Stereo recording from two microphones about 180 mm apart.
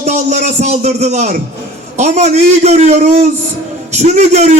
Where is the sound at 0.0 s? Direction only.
40° right (ahead or behind).